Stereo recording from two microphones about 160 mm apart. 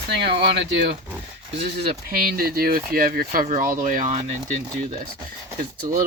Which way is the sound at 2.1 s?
65° right (ahead or behind).